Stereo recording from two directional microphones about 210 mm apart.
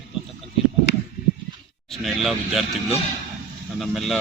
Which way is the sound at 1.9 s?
Centre (ahead or behind).